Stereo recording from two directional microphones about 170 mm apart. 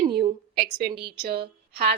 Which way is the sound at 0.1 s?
70° right (ahead or behind).